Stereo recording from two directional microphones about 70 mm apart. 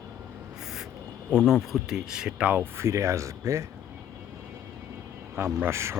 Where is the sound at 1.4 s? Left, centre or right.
Centre.